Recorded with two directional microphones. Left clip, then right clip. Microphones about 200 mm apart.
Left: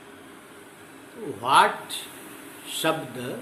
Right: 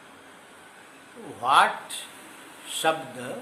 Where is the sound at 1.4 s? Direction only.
15° right (ahead or behind).